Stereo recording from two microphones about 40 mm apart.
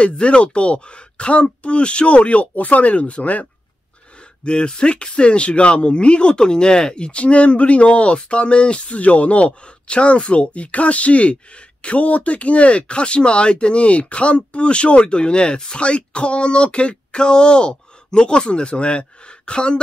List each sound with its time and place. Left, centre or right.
0.0 s speech: left
4.5 s speech: left